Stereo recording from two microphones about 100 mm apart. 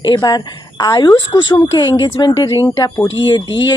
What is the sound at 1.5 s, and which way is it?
Speech, 35° left (ahead or behind).